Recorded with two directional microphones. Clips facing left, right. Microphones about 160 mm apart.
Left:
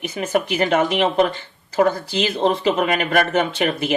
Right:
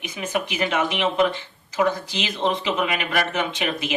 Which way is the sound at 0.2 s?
45° left (ahead or behind).